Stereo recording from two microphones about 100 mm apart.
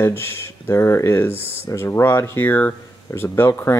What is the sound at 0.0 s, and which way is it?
Speech, 25° left (ahead or behind).